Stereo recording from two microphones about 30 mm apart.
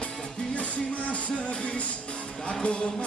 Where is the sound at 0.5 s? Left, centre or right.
Left.